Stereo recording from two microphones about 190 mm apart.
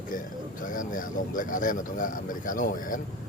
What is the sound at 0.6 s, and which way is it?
A man's voice, 45° left (ahead or behind).